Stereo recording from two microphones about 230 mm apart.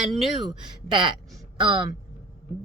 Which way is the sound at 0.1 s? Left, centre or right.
Centre.